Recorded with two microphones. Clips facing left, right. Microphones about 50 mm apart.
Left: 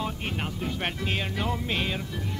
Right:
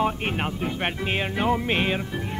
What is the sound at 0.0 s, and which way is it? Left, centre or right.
Speech, right.